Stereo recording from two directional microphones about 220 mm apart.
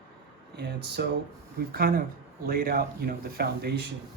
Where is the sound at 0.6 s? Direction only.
50° right (ahead or behind).